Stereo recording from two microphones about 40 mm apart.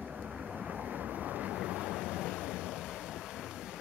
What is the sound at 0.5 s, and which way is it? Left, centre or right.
Vehicle, centre.